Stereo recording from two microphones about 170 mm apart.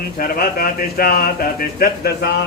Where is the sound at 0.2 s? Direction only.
60° left (ahead or behind).